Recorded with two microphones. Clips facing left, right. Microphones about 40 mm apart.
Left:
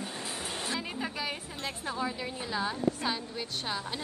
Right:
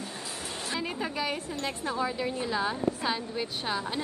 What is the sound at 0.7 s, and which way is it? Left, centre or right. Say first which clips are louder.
A woman's voice: right 5 dB; centre.